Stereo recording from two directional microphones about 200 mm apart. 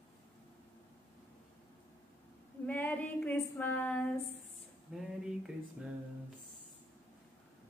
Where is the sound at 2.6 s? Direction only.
10° left (ahead or behind).